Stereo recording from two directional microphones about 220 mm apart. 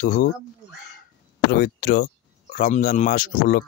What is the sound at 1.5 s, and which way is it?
Speech, 45° left (ahead or behind).